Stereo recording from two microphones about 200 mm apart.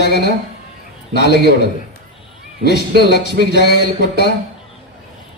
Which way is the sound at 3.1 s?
55° left (ahead or behind).